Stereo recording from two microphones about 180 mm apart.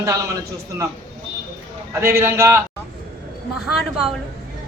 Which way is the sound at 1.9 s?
15° right (ahead or behind).